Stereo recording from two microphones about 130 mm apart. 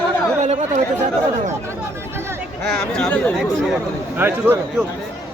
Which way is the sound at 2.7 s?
5° left (ahead or behind).